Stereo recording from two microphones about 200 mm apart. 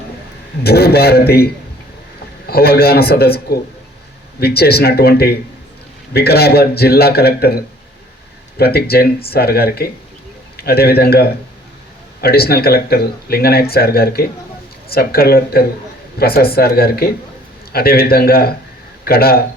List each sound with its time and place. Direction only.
0.6 s speech: 50° left (ahead or behind)
2.5 s speech: 50° left (ahead or behind)